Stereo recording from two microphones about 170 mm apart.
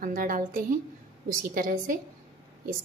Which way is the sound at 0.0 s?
55° right (ahead or behind).